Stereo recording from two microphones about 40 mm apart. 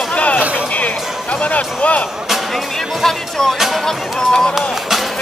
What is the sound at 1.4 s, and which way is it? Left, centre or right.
Speech, left.